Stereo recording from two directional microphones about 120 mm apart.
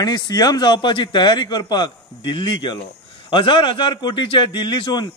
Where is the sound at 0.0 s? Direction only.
35° left (ahead or behind).